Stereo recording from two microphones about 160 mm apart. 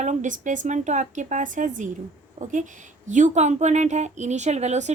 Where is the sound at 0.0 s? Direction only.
50° right (ahead or behind).